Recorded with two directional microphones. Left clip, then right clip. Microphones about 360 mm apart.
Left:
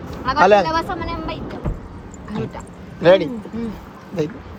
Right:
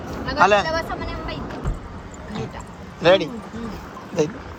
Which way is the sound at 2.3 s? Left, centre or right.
Centre.